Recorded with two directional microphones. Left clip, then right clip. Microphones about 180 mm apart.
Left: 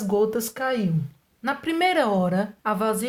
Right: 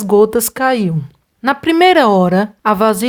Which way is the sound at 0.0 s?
50° right (ahead or behind).